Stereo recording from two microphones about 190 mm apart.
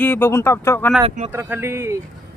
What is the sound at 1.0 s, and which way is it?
Speech, 30° right (ahead or behind).